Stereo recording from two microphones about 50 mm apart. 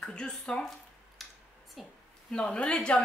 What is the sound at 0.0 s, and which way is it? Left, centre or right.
Speech, centre.